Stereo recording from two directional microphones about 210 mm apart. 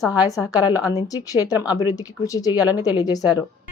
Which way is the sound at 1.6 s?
20° left (ahead or behind).